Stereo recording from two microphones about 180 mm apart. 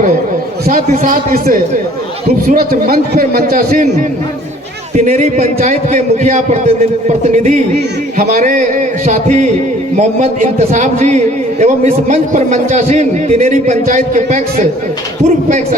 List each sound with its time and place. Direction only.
0.7 s a man's voice: 50° right (ahead or behind)
4.9 s a man's voice: 40° right (ahead or behind)